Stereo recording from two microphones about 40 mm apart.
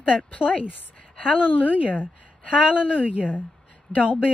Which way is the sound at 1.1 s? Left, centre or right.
Left.